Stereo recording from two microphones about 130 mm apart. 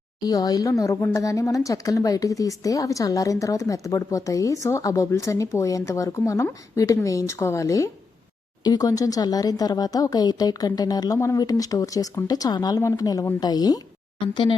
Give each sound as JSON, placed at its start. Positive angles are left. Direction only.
{"t": 0.3, "sound": "a woman's voice", "side_deg": 30}